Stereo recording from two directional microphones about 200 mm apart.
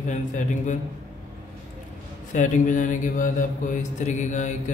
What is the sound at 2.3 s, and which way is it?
Speech, 40° left (ahead or behind).